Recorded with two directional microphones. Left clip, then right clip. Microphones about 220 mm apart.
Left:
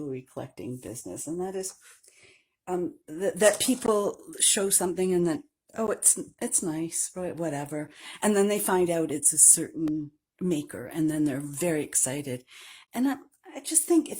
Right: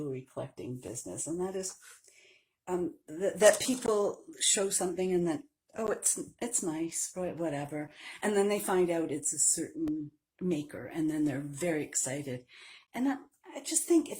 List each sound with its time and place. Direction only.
0.1 s speech: 45° left (ahead or behind)
2.6 s speech: 45° left (ahead or behind)